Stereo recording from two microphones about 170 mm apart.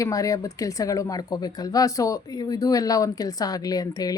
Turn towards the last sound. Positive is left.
turn(degrees=25)  # may be behind; listen again after turning